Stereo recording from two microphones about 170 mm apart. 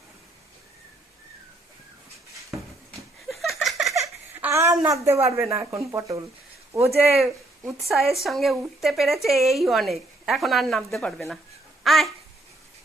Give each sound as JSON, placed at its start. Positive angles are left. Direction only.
{"t": 3.2, "sound": "a sound", "side_deg": 0}
{"t": 5.0, "sound": "speech", "side_deg": -15}
{"t": 8.1, "sound": "speech", "side_deg": 0}
{"t": 11.8, "sound": "babbling", "side_deg": 0}